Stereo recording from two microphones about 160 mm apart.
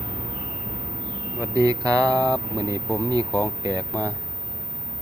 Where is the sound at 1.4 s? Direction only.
25° right (ahead or behind).